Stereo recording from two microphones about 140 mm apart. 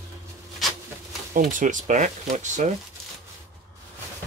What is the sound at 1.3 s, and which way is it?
Speech, 75° right (ahead or behind).